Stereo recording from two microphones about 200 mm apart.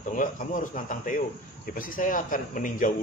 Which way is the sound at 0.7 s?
40° left (ahead or behind).